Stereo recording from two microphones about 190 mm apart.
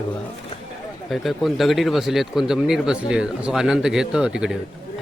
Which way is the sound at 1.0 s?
Centre (ahead or behind).